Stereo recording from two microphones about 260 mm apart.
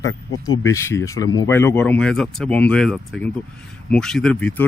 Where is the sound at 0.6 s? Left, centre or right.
Centre.